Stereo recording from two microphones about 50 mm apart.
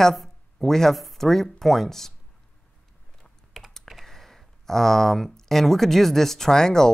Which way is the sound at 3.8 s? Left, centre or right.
Centre.